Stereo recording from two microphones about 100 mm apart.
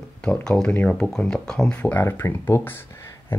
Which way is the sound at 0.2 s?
10° left (ahead or behind).